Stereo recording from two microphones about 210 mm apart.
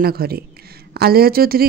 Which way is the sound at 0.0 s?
45° right (ahead or behind).